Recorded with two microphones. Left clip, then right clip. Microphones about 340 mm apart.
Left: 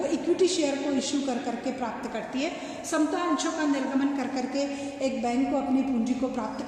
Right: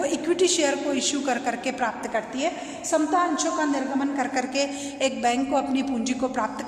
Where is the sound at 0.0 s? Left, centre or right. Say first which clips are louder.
Right 2 dB; right.